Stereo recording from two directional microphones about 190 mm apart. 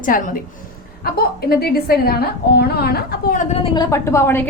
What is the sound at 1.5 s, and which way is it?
A woman's voice, 55° left (ahead or behind).